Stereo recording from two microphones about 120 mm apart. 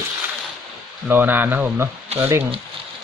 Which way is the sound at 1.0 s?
15° right (ahead or behind).